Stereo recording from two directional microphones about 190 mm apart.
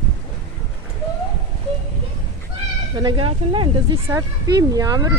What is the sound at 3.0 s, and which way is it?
Speech, 25° right (ahead or behind).